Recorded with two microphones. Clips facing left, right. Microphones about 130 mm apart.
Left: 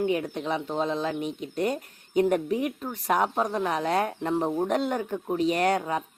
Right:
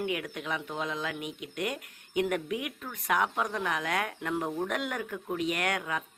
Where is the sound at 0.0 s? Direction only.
30° left (ahead or behind).